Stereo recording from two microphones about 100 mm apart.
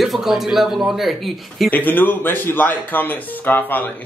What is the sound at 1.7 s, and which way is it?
Speech, 15° left (ahead or behind).